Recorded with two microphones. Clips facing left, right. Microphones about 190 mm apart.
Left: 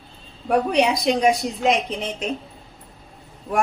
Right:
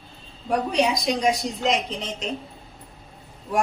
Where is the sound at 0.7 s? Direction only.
60° left (ahead or behind).